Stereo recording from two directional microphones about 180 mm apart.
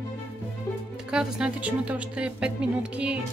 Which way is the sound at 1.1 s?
5° right (ahead or behind).